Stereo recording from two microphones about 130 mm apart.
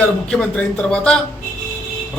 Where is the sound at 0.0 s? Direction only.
10° left (ahead or behind).